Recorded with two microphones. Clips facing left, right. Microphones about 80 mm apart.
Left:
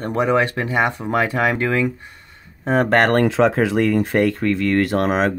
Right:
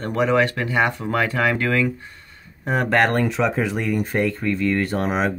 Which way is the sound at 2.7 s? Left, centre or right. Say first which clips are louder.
Left 3 dB; left.